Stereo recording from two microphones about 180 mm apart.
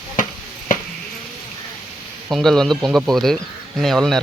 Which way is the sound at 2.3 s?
Centre (ahead or behind).